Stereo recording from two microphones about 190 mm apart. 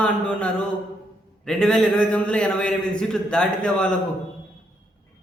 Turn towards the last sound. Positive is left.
turn(degrees=5)  # may be behind; listen again after turning